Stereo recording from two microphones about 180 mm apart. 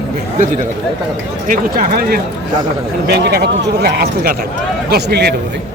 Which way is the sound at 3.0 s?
65° right (ahead or behind).